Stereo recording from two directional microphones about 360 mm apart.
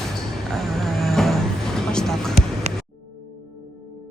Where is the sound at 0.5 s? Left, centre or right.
Centre.